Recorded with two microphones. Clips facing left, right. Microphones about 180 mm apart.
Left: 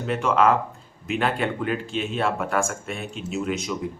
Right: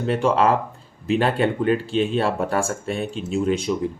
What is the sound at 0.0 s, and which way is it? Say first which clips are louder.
Speech: right 2 dB; 30° right (ahead or behind).